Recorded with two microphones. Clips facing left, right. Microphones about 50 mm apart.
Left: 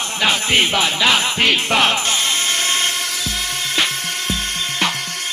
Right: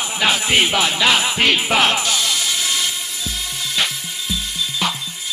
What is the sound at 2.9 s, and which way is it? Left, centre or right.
Music, left.